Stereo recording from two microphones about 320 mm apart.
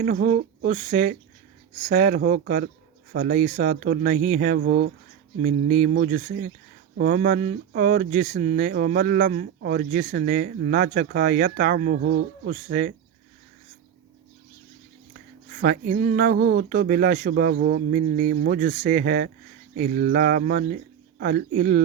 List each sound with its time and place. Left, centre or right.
0.0 s speech: right
15.5 s speech: right